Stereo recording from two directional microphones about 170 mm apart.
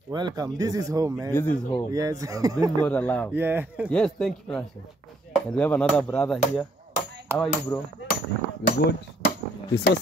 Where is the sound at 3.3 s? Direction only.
10° right (ahead or behind).